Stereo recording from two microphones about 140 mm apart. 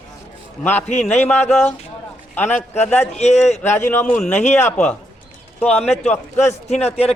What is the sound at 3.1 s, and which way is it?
Speech, 50° left (ahead or behind).